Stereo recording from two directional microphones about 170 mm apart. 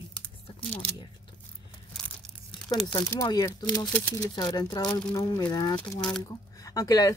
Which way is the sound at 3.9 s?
10° left (ahead or behind).